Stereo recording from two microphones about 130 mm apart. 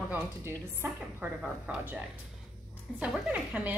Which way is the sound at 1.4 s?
5° right (ahead or behind).